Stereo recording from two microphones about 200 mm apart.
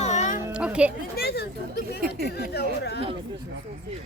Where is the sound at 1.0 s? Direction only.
50° left (ahead or behind).